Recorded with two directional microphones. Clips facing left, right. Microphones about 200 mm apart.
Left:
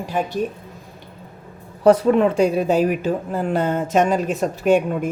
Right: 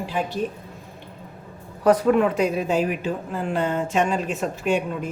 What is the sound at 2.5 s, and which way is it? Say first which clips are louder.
A woman's voice: left 5 dB; 40° left (ahead or behind).